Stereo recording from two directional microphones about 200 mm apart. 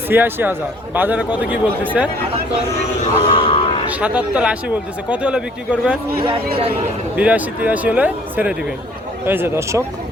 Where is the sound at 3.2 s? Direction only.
25° left (ahead or behind).